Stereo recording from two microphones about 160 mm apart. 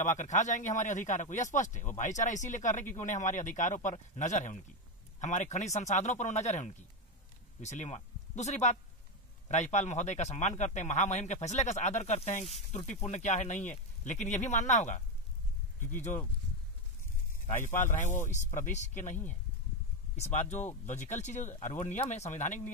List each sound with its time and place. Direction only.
0.0 s speech: 50° left (ahead or behind)
17.9 s speech: 50° left (ahead or behind)
20.2 s speech: 45° left (ahead or behind)